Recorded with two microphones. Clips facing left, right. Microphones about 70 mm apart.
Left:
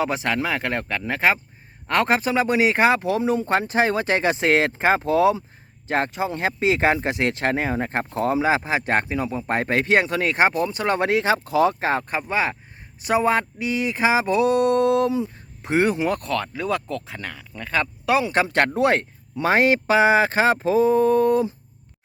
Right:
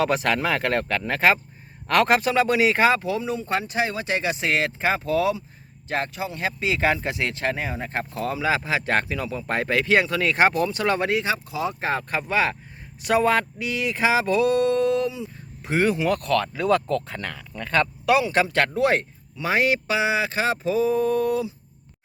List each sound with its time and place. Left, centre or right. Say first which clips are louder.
0.0 s speech: right 1 dB; centre; by 12.0 s left
12.3 s speech: right 1 dB; centre
13.7 s speech: left 3 dB; left
15.0 s speech: left 6 dB; left
16.4 s speech: right 4 dB; centre
18.0 s speech: left 1 dB; left